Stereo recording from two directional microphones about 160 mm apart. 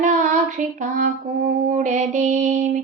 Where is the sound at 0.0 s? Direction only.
50° right (ahead or behind).